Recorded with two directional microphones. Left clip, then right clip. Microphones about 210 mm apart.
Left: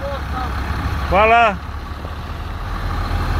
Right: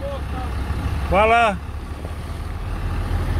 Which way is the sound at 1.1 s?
10° right (ahead or behind).